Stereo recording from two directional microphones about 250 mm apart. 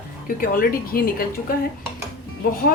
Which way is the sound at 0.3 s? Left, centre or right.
Left.